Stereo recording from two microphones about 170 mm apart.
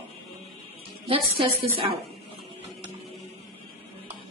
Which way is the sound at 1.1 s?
30° right (ahead or behind).